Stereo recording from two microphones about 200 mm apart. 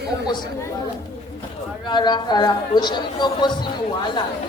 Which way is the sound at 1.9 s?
20° left (ahead or behind).